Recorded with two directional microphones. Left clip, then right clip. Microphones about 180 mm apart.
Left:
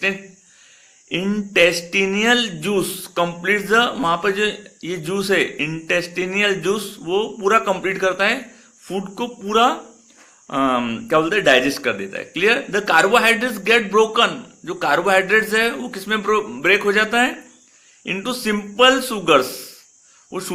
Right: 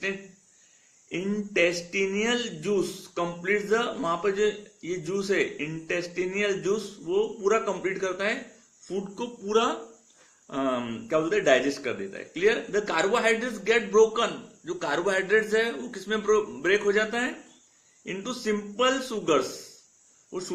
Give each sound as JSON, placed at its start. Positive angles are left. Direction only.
{"t": 1.1, "sound": "speech", "side_deg": 35}
{"t": 8.9, "sound": "speech", "side_deg": 20}